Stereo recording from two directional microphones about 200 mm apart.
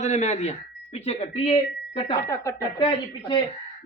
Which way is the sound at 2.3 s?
15° left (ahead or behind).